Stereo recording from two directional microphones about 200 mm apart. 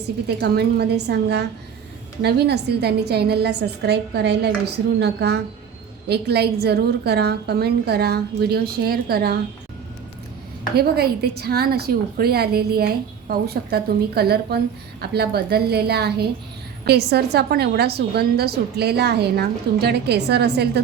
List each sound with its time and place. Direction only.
0.3 s a woman's voice: 55° right (ahead or behind)
10.8 s a woman's voice: 50° right (ahead or behind)